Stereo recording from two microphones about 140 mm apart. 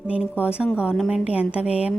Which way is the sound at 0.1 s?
10° right (ahead or behind).